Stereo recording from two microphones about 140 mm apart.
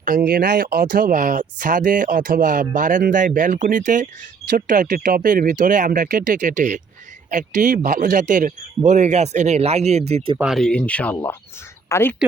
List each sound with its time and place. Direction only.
0.0 s a man's voice: 90° right; by 10.3 s 50° right (ahead or behind)
10.3 s speech: 5° right (ahead or behind); by 12.1 s 20° left (ahead or behind)